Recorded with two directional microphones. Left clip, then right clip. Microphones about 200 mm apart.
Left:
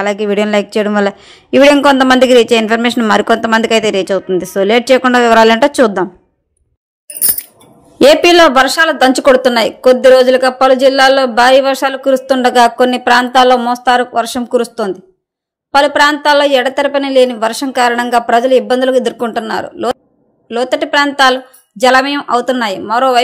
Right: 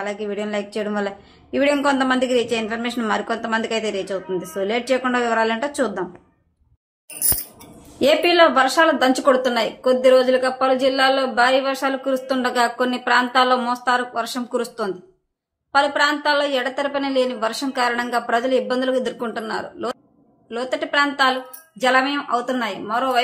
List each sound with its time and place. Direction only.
0.0 s speech: 50° left (ahead or behind)
8.0 s a woman's voice: 50° left (ahead or behind)